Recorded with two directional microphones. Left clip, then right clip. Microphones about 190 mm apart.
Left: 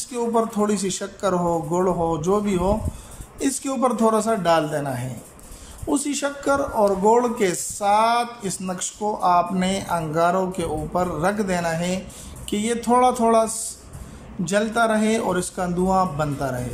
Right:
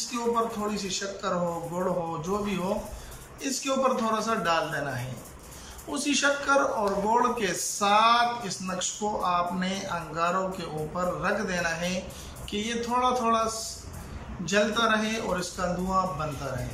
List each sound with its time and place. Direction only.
0.6 s a man's voice: 45° left (ahead or behind)
3.3 s a man's voice: 40° left (ahead or behind)